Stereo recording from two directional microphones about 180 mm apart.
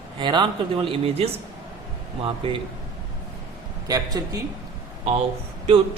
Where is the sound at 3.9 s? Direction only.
20° right (ahead or behind).